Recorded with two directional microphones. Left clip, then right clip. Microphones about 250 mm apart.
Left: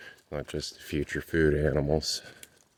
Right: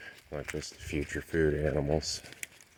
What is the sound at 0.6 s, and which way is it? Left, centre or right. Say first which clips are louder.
Speech: left 3 dB; left.